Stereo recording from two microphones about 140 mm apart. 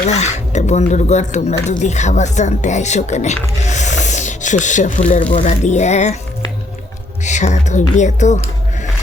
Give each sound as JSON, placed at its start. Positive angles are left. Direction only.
{"t": 0.1, "sound": "speech", "side_deg": 55}
{"t": 3.6, "sound": "a sound", "side_deg": 55}
{"t": 5.5, "sound": "speech", "side_deg": 55}
{"t": 7.3, "sound": "speech", "side_deg": 60}